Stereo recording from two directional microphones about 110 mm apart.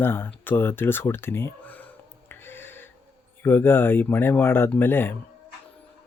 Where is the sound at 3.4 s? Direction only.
20° left (ahead or behind).